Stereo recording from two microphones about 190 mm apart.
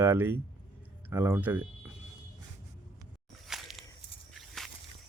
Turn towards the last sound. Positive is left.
turn(degrees=0)  # may be behind; listen again after turning